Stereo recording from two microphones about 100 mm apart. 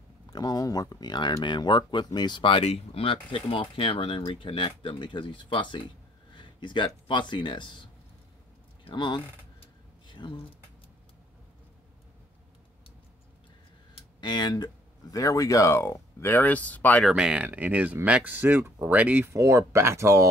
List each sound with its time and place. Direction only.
0.3 s speech: 40° left (ahead or behind)
8.8 s speech: 50° left (ahead or behind)
10.0 s a sound: 50° left (ahead or behind)
13.9 s speech: 50° left (ahead or behind); by 17.0 s 15° left (ahead or behind)
17.1 s speech: 10° right (ahead or behind)
19.3 s speech: 30° right (ahead or behind)